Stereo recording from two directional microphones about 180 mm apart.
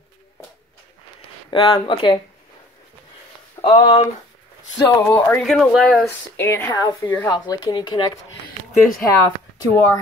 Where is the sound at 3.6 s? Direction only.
25° left (ahead or behind).